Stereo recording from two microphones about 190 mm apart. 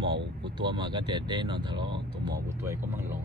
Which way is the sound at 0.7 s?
25° right (ahead or behind).